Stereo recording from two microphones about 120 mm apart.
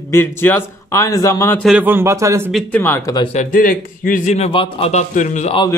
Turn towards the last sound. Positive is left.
turn(degrees=75)  # may be behind; listen again after turning